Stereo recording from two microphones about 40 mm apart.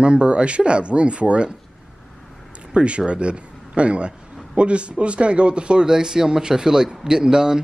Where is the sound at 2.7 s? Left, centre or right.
Right.